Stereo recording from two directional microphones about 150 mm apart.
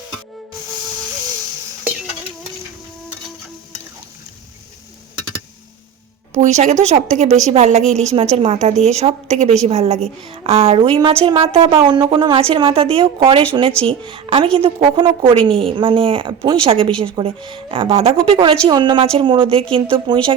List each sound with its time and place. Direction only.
6.3 s a woman's voice: 50° right (ahead or behind); by 20.1 s 35° right (ahead or behind)